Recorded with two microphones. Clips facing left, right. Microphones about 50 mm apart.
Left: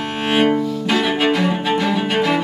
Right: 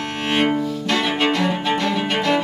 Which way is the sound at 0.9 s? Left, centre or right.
Centre.